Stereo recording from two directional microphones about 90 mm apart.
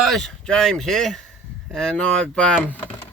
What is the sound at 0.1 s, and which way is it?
Speech, 5° left (ahead or behind).